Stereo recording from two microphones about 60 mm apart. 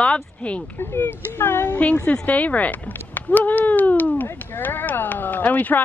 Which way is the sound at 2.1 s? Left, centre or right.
Left.